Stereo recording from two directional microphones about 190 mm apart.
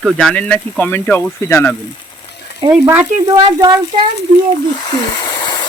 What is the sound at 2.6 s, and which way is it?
Speech, 15° right (ahead or behind).